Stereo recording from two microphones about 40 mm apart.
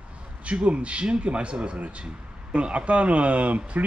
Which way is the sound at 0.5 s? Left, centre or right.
Right.